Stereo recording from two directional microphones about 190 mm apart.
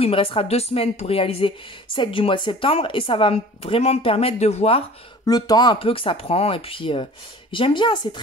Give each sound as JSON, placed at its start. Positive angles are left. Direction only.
{"t": 0.0, "sound": "a woman's voice", "side_deg": 30}
{"t": 5.2, "sound": "a woman's voice", "side_deg": 20}